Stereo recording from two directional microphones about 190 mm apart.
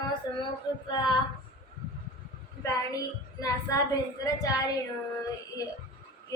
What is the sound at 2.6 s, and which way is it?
Speech, 20° left (ahead or behind).